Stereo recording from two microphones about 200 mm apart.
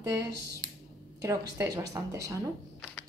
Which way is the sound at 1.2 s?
15° right (ahead or behind).